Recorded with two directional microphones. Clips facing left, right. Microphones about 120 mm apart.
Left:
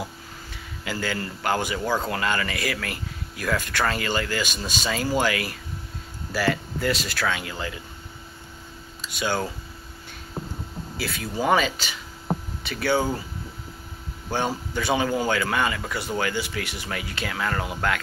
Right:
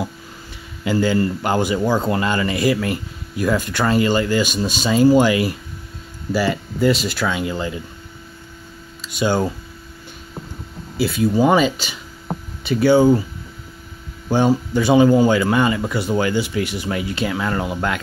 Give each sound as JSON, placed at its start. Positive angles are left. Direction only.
{"t": 0.8, "sound": "speech", "side_deg": -25}
{"t": 9.2, "sound": "speech", "side_deg": -25}
{"t": 11.0, "sound": "speech", "side_deg": -20}
{"t": 14.3, "sound": "speech", "side_deg": -15}